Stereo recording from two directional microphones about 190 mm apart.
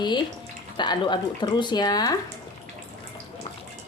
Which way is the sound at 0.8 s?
25° left (ahead or behind).